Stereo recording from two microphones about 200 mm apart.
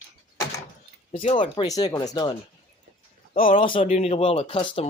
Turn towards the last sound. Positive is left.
turn(degrees=25)  # may be behind; listen again after turning